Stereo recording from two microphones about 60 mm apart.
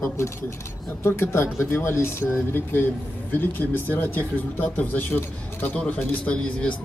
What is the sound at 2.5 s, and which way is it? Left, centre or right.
Speech, left.